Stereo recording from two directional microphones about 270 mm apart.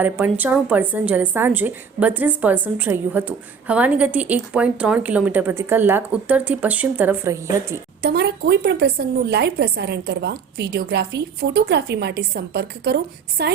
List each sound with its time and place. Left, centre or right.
0.0 s a woman's voice: centre
8.0 s a woman's voice: right